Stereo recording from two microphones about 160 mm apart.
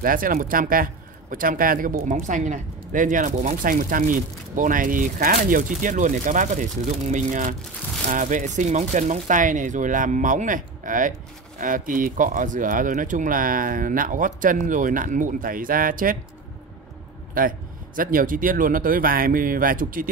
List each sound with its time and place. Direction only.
0.0 s speech: 60° right (ahead or behind)
17.3 s speech: 60° right (ahead or behind)